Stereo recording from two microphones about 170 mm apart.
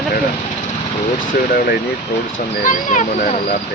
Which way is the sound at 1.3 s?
60° left (ahead or behind).